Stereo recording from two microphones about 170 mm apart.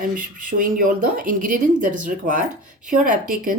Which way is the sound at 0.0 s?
55° right (ahead or behind).